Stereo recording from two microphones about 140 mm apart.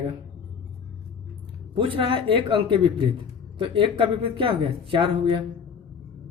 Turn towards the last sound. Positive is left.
turn(degrees=-35)  # may be behind; listen again after turning